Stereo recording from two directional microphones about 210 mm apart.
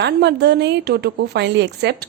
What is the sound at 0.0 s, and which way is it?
Speech, 55° right (ahead or behind).